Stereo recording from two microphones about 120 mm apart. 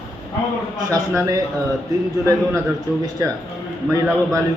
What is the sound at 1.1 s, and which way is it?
Speech, 25° right (ahead or behind).